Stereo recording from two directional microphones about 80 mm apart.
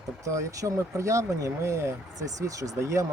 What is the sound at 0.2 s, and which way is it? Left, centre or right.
Speech, right.